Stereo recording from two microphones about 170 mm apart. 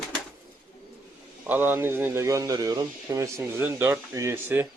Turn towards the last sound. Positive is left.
turn(degrees=-15)  # may be behind; listen again after turning